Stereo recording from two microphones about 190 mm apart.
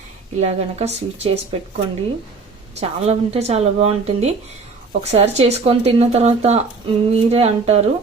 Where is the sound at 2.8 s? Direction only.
35° right (ahead or behind).